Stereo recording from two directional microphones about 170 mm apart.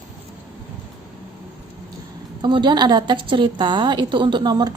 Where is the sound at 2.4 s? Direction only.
25° right (ahead or behind).